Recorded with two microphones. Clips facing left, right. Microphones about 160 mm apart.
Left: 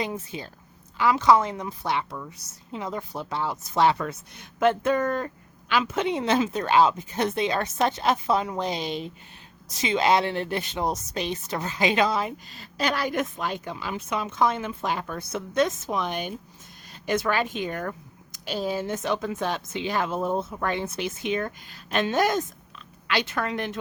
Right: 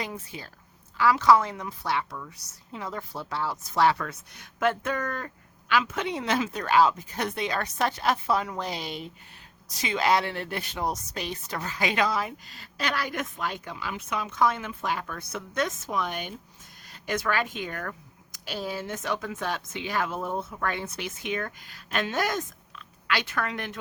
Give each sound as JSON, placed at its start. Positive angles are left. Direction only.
{"t": 0.0, "sound": "speech", "side_deg": 20}